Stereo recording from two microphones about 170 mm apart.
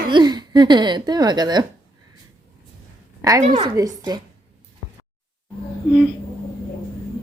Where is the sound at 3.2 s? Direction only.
20° right (ahead or behind).